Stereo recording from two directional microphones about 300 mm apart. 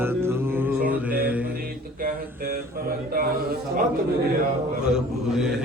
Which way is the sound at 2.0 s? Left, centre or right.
Right.